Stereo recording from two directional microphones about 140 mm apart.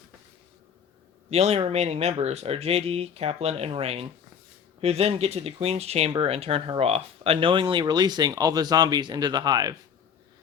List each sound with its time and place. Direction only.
1.3 s speech: 50° right (ahead or behind); by 9.7 s 30° right (ahead or behind)